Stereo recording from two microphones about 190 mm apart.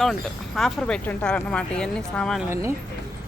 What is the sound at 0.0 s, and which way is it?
Speech, centre (ahead or behind).